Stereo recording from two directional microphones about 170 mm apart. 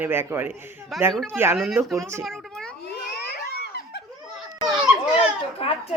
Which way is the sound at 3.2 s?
70° left (ahead or behind).